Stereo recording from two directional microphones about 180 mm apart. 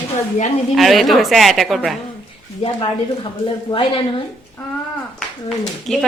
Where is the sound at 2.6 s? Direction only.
30° left (ahead or behind).